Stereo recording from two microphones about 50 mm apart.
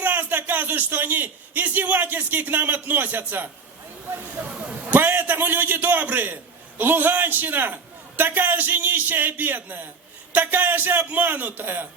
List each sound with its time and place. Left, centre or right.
0.0 s a man's voice: right